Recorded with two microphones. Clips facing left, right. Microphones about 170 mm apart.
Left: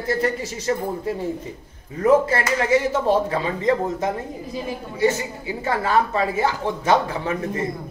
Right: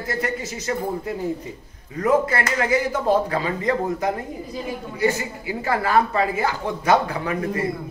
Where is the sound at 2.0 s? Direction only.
30° left (ahead or behind).